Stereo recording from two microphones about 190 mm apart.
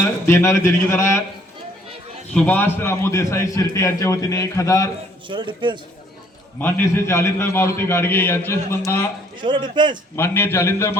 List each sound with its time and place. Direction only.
0.0 s a man's voice: 15° left (ahead or behind)
2.3 s a man's voice: 10° left (ahead or behind)
5.3 s a man's voice: 25° right (ahead or behind)
6.6 s a man's voice: 10° left (ahead or behind)
9.4 s a man's voice: 25° right (ahead or behind)
10.2 s a man's voice: 10° left (ahead or behind)